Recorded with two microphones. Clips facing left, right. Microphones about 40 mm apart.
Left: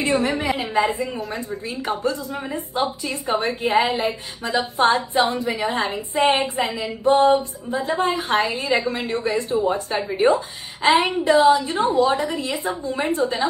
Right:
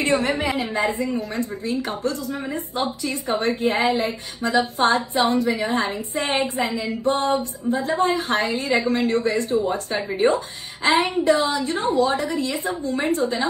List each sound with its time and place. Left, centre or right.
0.0 s a woman's voice: right
0.3 s a woman's voice: centre
0.7 s a woman's voice: left